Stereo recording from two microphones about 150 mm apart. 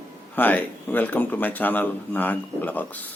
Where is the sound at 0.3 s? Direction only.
10° left (ahead or behind).